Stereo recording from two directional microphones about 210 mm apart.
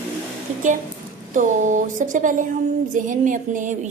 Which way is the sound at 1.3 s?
35° right (ahead or behind).